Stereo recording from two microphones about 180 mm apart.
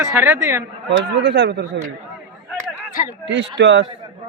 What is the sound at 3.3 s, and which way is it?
Speech, 85° right.